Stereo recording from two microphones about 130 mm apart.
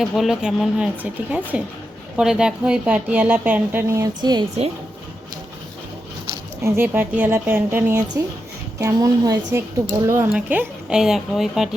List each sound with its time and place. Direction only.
0.0 s speech: centre (ahead or behind); by 4.4 s 30° right (ahead or behind)
6.6 s speech: 20° right (ahead or behind)
8.8 s a woman's voice: 25° right (ahead or behind)
10.3 s speech: 10° right (ahead or behind)